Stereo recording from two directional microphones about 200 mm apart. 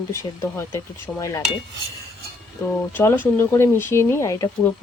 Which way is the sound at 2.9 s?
10° left (ahead or behind).